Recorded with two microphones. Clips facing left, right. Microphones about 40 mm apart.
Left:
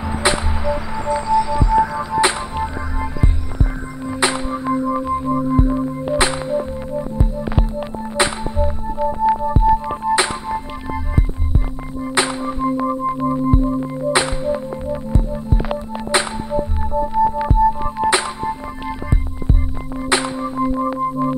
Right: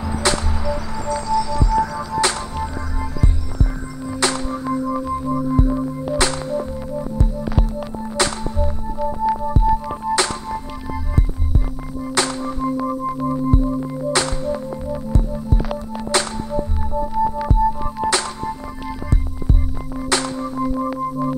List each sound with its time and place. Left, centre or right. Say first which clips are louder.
0.1 s music: left 2 dB; left
20.0 s music: left 2 dB; left